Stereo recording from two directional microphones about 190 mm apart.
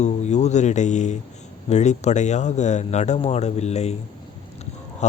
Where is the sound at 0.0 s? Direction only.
35° left (ahead or behind).